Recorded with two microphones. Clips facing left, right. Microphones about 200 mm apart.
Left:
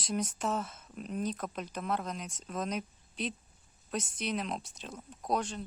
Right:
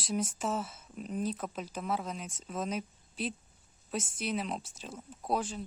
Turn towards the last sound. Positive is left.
turn(degrees=-5)  # may be behind; listen again after turning